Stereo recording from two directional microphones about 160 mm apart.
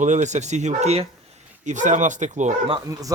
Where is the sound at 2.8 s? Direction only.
20° right (ahead or behind).